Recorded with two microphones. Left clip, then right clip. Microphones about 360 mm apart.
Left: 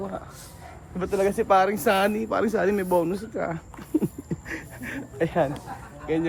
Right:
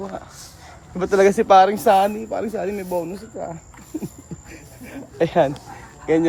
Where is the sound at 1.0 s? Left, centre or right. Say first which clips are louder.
Right 8 dB; right; by 3.6 s centre.